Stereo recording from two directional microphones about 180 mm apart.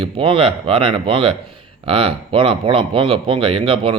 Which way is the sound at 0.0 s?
30° right (ahead or behind).